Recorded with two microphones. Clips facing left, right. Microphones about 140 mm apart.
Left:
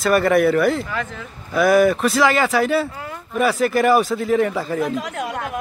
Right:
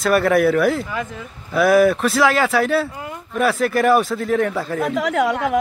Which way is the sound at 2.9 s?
20° right (ahead or behind).